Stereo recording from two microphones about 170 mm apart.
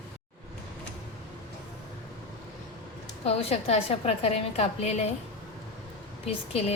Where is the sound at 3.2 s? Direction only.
35° left (ahead or behind).